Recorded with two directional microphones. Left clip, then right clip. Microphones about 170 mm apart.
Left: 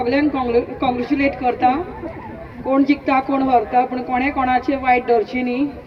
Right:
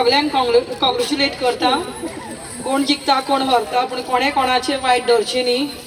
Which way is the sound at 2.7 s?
65° right (ahead or behind).